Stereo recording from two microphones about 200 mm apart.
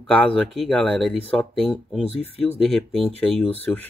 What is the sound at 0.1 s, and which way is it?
Speech, 5° left (ahead or behind).